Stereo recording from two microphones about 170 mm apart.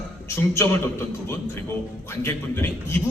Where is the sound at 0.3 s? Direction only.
15° left (ahead or behind).